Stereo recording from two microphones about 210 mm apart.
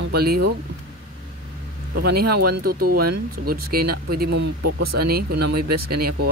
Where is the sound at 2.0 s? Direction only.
50° right (ahead or behind).